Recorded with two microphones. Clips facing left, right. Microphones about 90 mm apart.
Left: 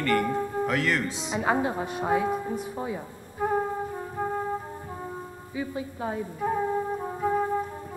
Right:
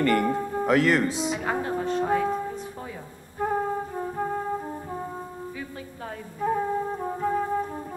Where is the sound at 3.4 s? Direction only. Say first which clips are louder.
Even; 10° left (ahead or behind).